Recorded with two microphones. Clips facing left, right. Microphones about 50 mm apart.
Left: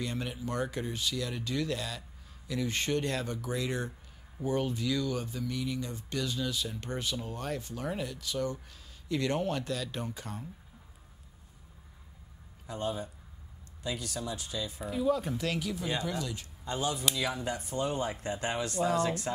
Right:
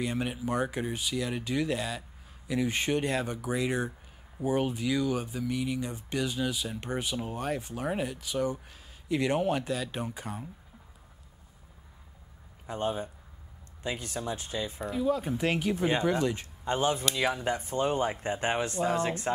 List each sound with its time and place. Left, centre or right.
0.0 s speech: centre
12.6 s speech: right
14.8 s speech: centre
15.3 s speech: right